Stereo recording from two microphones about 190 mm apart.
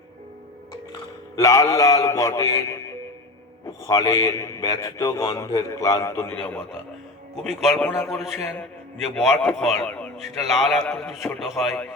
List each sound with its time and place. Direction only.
0.7 s a man's voice: 20° left (ahead or behind); by 11.9 s centre (ahead or behind)